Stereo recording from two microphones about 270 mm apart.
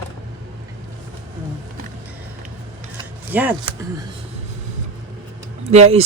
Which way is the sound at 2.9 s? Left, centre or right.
Centre.